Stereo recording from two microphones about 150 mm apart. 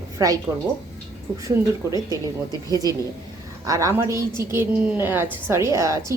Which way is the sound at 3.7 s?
20° right (ahead or behind).